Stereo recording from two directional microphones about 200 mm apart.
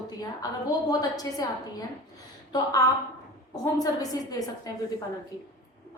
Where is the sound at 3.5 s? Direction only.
15° left (ahead or behind).